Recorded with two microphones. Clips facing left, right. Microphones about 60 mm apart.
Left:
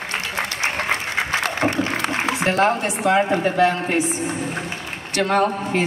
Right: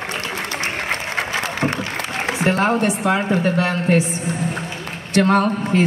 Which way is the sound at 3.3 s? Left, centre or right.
Centre.